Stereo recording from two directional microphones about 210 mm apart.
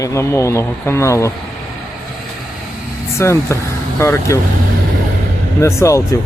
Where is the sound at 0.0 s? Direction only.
15° left (ahead or behind).